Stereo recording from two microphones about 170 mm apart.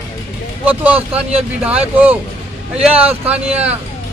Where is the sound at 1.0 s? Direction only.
35° right (ahead or behind).